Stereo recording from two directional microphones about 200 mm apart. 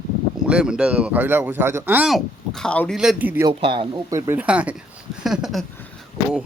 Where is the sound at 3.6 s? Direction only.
25° right (ahead or behind).